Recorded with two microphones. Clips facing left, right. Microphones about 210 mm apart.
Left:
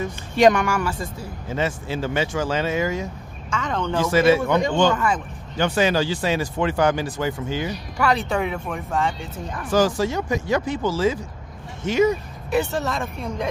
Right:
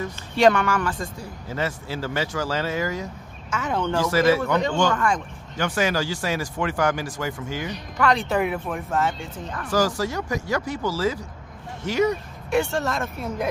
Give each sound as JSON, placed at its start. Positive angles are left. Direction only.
{"t": 0.0, "sound": "speech", "side_deg": 15}
{"t": 1.5, "sound": "speech", "side_deg": 20}
{"t": 3.4, "sound": "speech", "side_deg": -5}
{"t": 4.0, "sound": "speech", "side_deg": 20}
{"t": 4.9, "sound": "speech", "side_deg": 5}
{"t": 5.6, "sound": "speech", "side_deg": 25}
{"t": 7.7, "sound": "speech", "side_deg": 5}
{"t": 9.5, "sound": "speech", "side_deg": 15}
{"t": 12.4, "sound": "speech", "side_deg": 0}